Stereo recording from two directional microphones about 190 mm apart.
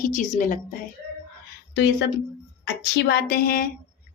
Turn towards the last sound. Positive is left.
turn(degrees=50)  # may be behind; listen again after turning